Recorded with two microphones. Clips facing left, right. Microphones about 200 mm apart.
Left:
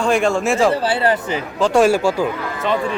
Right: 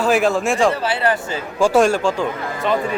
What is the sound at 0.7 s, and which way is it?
Speech, 30° left (ahead or behind).